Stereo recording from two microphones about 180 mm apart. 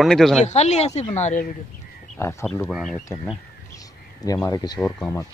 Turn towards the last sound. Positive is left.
turn(degrees=5)  # may be behind; listen again after turning